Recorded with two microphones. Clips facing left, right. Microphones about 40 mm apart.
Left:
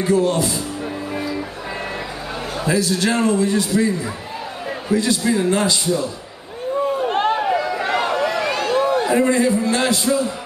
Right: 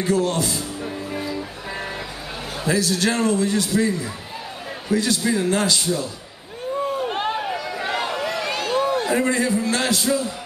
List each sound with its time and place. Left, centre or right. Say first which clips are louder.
0.0 s speech: left 3 dB; left
1.1 s music: left 3 dB; centre
2.6 s a man's voice: left 1 dB; left
3.7 s speech: left 2 dB; left
4.9 s a man's voice: left 2 dB; left
6.9 s run: left 7 dB; centre
8.5 s a sound: even; centre
9.1 s speech: left 4 dB; left